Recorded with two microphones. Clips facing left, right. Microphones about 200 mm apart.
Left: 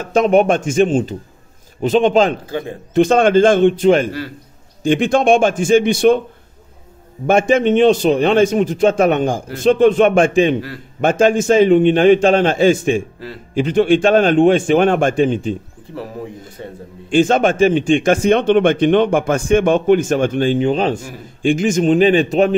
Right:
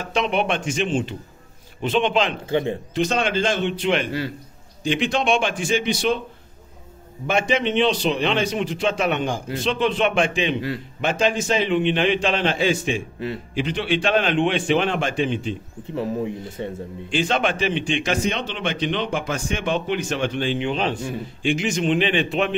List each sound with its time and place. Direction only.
0.0 s a man's voice: 45° left (ahead or behind)
2.4 s speech: 25° right (ahead or behind)
2.9 s a man's voice: 50° left (ahead or behind)
7.2 s a man's voice: 50° left (ahead or behind)
17.1 s a man's voice: 45° left (ahead or behind)